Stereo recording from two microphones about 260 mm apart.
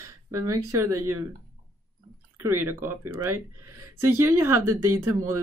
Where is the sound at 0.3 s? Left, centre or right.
Centre.